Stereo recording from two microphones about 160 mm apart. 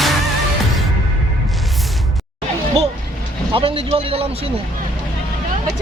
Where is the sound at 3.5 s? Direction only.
35° right (ahead or behind).